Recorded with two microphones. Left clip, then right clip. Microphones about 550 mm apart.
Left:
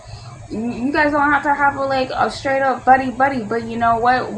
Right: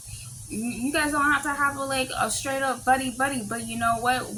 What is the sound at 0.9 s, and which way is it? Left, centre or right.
A woman's voice, right.